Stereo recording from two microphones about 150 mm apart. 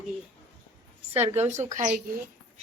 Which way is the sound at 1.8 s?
55° right (ahead or behind).